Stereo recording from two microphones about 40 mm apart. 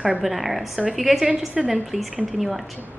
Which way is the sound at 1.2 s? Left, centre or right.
Right.